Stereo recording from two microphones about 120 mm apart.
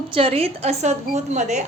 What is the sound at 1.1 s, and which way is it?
Speech, 80° right.